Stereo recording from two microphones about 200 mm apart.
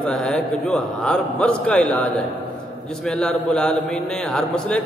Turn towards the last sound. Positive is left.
turn(degrees=5)  # may be behind; listen again after turning